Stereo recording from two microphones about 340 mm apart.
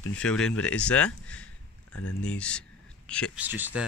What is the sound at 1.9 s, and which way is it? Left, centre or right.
Speech, left.